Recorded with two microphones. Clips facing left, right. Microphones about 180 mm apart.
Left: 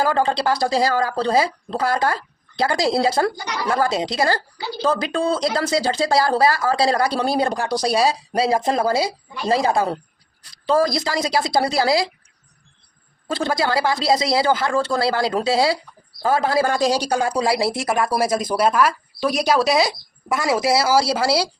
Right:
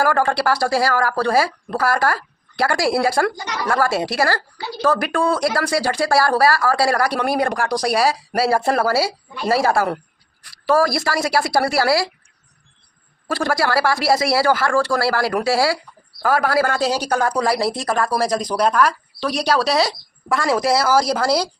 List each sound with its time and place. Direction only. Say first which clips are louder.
0.0 s speech: right 1 dB; 20° left (ahead or behind)
13.2 s speech: right 1 dB; 20° left (ahead or behind)